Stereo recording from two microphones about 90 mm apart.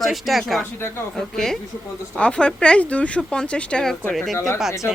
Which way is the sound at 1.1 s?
5° left (ahead or behind).